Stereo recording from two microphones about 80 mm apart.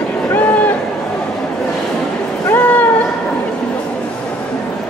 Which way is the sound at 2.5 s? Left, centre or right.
Centre.